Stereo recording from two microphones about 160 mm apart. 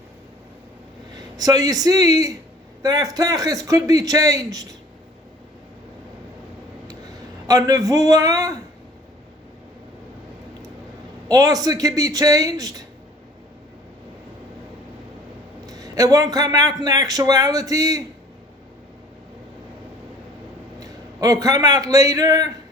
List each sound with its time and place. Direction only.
1.1 s a man's voice: 25° right (ahead or behind)
7.4 s a man's voice: 20° right (ahead or behind)
11.3 s a man's voice: 20° right (ahead or behind)
15.6 s a man's voice: 25° right (ahead or behind)
20.7 s a man's voice: 20° right (ahead or behind)